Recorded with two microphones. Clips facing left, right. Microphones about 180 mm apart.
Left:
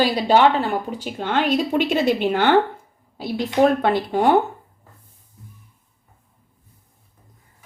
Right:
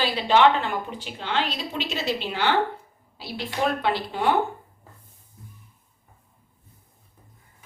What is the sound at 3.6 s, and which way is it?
Speech, 50° left (ahead or behind).